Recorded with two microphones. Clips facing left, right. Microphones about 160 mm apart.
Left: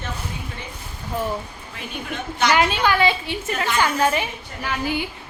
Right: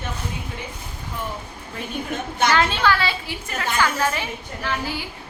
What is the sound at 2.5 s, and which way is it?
A woman's voice, 15° left (ahead or behind).